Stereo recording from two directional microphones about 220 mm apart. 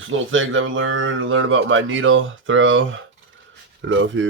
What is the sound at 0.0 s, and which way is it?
Speech, 60° right (ahead or behind).